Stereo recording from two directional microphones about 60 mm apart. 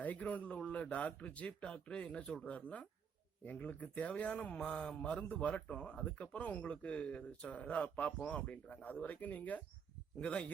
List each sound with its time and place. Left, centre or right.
0.0 s a man's voice: left